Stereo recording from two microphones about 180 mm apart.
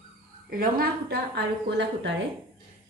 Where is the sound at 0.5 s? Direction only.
55° right (ahead or behind); by 2.1 s 70° right (ahead or behind).